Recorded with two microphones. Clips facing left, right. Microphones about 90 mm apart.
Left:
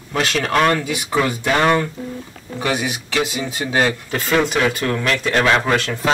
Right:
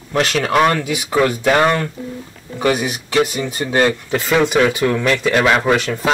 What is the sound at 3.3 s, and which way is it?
Speech, 5° left (ahead or behind).